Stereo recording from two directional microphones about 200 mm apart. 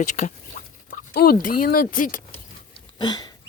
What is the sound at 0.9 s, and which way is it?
Speech, 50° left (ahead or behind).